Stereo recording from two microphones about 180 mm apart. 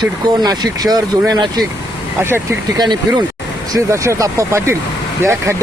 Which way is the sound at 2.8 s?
25° right (ahead or behind).